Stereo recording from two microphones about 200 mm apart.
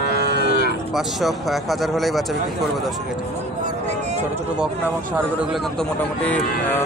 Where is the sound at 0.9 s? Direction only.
Centre (ahead or behind).